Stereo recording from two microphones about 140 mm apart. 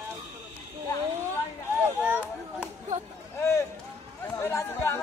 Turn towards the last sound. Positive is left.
turn(degrees=20)  # may be behind; listen again after turning